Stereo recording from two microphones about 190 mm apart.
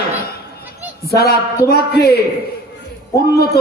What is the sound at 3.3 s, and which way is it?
Speech, 55° left (ahead or behind).